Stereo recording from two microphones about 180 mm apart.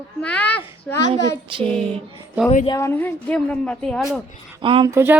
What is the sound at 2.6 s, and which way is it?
Speech, 20° left (ahead or behind).